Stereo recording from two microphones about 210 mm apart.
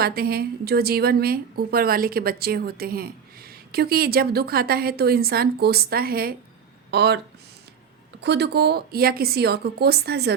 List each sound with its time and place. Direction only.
0.0 s speech: 45° right (ahead or behind)
8.2 s speech: 55° right (ahead or behind)